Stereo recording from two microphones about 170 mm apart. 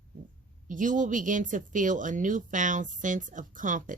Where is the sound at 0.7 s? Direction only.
50° right (ahead or behind).